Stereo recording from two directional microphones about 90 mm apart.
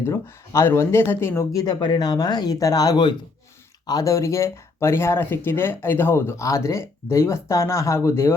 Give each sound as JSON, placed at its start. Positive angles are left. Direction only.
{"t": 0.0, "sound": "speech", "side_deg": 30}
{"t": 1.5, "sound": "speech", "side_deg": 50}
{"t": 3.8, "sound": "speech", "side_deg": 40}